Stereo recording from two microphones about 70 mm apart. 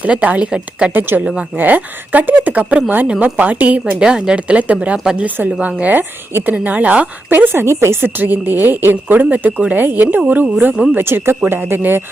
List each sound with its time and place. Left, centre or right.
0.0 s speech: right
0.9 s speech: right
10.9 s speech: right